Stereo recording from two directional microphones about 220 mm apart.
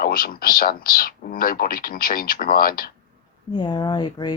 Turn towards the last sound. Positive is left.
turn(degrees=20)  # may be behind; listen again after turning